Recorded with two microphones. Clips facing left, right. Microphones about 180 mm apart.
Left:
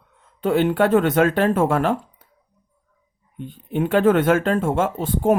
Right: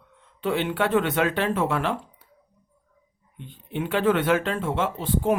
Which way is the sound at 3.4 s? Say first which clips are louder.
Left 7 dB; 45° left (ahead or behind).